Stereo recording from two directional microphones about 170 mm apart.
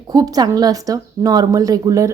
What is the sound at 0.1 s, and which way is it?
Speech, 20° right (ahead or behind).